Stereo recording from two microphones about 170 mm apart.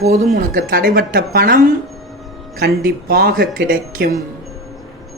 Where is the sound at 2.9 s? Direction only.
60° right (ahead or behind).